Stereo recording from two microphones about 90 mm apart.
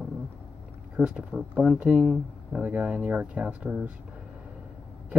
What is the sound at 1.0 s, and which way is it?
Speech, 20° right (ahead or behind).